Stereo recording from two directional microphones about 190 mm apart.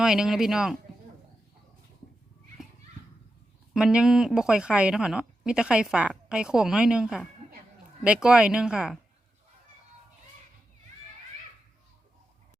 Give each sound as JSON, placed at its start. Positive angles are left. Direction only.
{"t": 0.0, "sound": "speech", "side_deg": -5}
{"t": 3.8, "sound": "speech", "side_deg": 0}